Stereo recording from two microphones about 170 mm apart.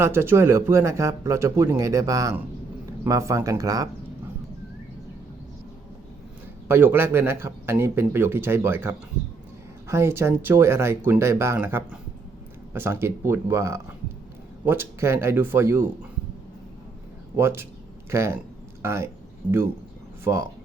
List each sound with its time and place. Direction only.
0.0 s speech: 15° right (ahead or behind)
6.7 s speech: 10° right (ahead or behind)
17.3 s speech: 15° right (ahead or behind)